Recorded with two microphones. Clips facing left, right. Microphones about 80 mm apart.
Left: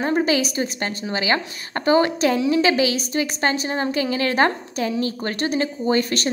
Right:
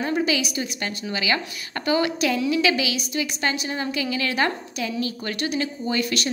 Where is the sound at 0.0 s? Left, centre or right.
Left.